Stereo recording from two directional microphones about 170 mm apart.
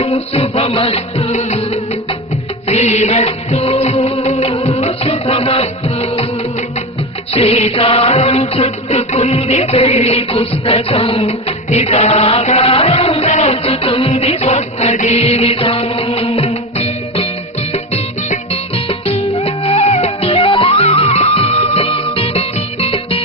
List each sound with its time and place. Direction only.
0.0 s music: 35° left (ahead or behind)
7.3 s music: 35° left (ahead or behind)